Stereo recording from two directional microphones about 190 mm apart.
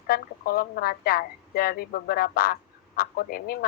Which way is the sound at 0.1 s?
50° left (ahead or behind).